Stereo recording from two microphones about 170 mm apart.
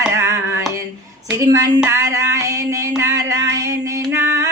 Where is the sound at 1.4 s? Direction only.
20° right (ahead or behind).